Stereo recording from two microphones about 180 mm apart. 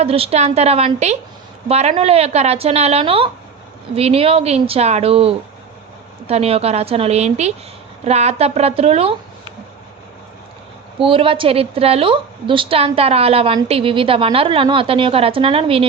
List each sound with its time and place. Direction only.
0.0 s a woman's voice: 35° right (ahead or behind)
11.0 s a woman's voice: 30° right (ahead or behind)